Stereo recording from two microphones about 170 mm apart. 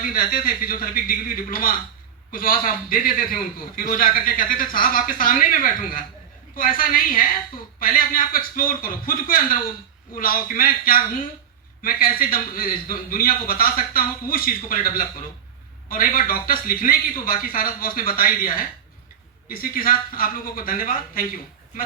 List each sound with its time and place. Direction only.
0.0 s a man's voice: 55° left (ahead or behind)